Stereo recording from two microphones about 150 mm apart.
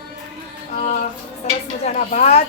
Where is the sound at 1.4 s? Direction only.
45° left (ahead or behind).